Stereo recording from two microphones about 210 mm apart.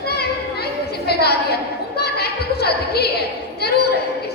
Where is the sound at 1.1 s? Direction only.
50° left (ahead or behind).